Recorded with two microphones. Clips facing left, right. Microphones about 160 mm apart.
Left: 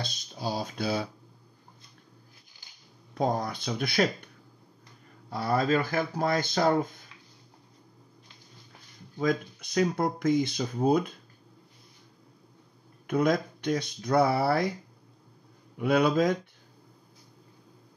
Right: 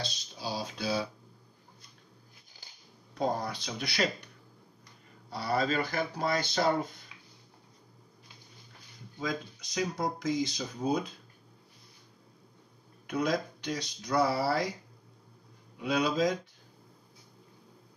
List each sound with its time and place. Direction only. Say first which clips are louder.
0.0 s speech: left 4 dB; 50° left (ahead or behind)
3.2 s speech: left 3 dB; 55° left (ahead or behind)
5.3 s speech: left 4 dB; 50° left (ahead or behind)
9.2 s speech: left 7 dB; 55° left (ahead or behind)
13.0 s speech: left 5 dB; 55° left (ahead or behind)
15.8 s speech: left 5 dB; 55° left (ahead or behind)